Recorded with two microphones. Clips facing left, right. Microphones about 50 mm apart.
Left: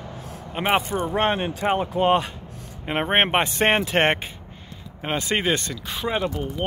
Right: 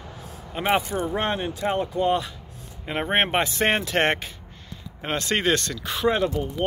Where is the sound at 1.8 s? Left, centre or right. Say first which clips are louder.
Left 3 dB; left.